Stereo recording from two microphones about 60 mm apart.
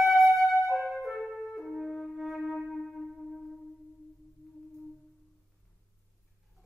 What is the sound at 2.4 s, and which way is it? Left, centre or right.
Music, centre.